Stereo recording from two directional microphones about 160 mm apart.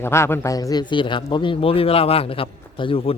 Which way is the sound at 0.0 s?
15° left (ahead or behind).